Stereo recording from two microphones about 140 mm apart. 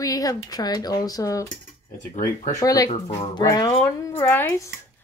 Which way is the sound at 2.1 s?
65° left (ahead or behind).